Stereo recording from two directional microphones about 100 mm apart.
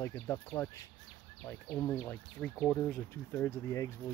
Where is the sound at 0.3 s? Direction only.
25° left (ahead or behind).